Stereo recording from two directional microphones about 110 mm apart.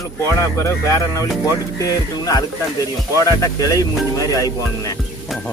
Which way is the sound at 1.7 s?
30° left (ahead or behind).